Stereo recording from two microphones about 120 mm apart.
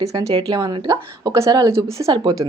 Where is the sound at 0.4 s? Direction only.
35° right (ahead or behind).